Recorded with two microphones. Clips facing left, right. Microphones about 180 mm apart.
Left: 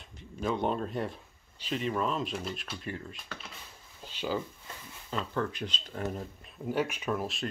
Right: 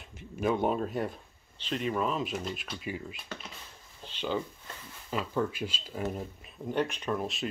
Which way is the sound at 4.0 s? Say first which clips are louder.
Right 1 dB; 5° left (ahead or behind).